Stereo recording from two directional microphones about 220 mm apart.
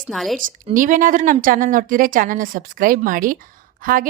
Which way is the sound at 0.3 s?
35° right (ahead or behind).